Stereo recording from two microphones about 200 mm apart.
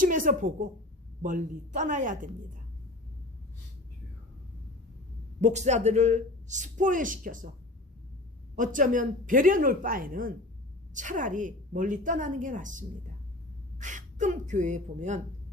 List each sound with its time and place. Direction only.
0.0 s a woman's voice: 40° right (ahead or behind)
5.4 s a woman's voice: 35° right (ahead or behind)
8.5 s a woman's voice: 40° right (ahead or behind)